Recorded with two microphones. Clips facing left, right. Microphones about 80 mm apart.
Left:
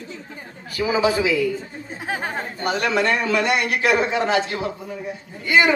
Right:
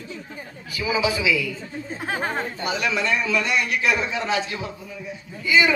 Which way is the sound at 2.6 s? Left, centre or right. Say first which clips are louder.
Left 6 dB; left.